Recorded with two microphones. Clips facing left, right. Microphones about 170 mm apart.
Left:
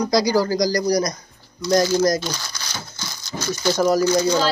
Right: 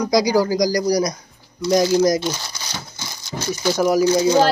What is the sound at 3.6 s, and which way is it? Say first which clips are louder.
Speech: right 1 dB; 10° right (ahead or behind).